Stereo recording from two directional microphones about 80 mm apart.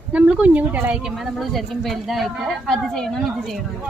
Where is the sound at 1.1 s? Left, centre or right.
Centre.